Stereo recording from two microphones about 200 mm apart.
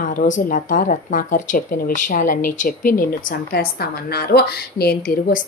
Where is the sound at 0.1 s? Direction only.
45° left (ahead or behind).